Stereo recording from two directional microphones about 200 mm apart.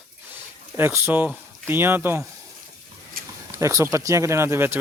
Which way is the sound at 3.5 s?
15° right (ahead or behind).